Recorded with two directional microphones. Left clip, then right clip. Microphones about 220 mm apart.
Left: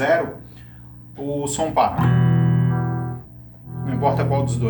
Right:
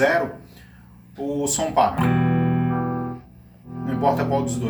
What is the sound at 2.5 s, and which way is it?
Music, 50° left (ahead or behind).